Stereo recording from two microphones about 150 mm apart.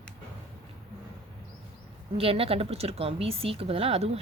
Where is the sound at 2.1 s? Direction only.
40° right (ahead or behind).